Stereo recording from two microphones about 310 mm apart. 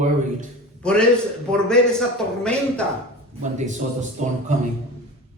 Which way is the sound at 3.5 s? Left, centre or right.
Right.